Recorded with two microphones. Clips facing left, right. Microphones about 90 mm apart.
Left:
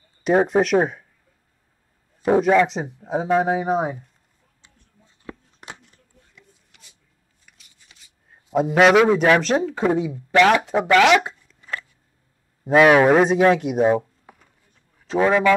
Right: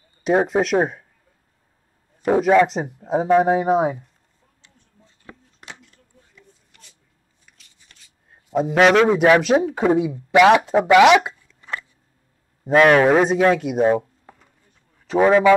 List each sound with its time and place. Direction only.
0.5 s speech: centre (ahead or behind)
2.4 s speech: 5° right (ahead or behind)
2.8 s a man's voice: 15° right (ahead or behind)
3.3 s a man's voice: 5° right (ahead or behind)
5.6 s a sound: 20° left (ahead or behind)
6.3 s a sound: 5° left (ahead or behind)
7.9 s shuffling cards: 10° left (ahead or behind)
8.5 s a man's voice: centre (ahead or behind); by 10.6 s 15° right (ahead or behind)
10.7 s a sound: 10° right (ahead or behind)
12.6 s speech: 5° left (ahead or behind)
15.0 s speech: 15° right (ahead or behind)